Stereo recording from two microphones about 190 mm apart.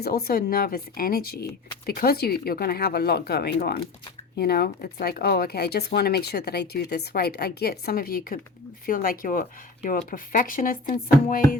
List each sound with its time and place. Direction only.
0.0 s speech: 55° left (ahead or behind)